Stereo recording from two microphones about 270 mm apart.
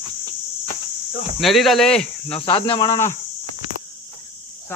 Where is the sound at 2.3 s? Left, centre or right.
Centre.